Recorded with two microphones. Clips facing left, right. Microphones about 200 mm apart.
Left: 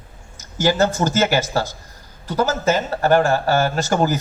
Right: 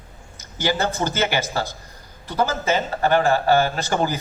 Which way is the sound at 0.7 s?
45° left (ahead or behind).